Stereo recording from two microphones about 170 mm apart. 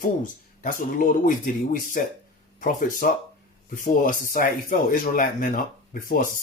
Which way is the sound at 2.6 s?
55° left (ahead or behind).